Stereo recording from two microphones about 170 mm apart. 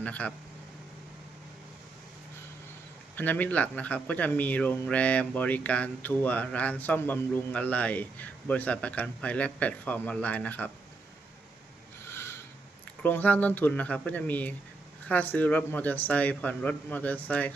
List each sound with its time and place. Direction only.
0.0 s speech: 10° left (ahead or behind)
3.2 s speech: 10° left (ahead or behind)
12.0 s a sound: 15° left (ahead or behind)
13.0 s speech: 10° left (ahead or behind)